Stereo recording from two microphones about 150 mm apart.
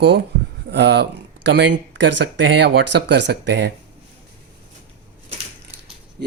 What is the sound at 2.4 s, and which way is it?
Speech, 90° right.